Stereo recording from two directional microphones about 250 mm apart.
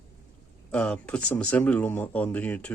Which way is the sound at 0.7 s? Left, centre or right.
Centre.